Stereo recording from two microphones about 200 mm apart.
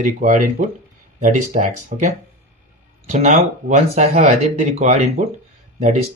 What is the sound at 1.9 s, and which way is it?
Speech, 40° right (ahead or behind).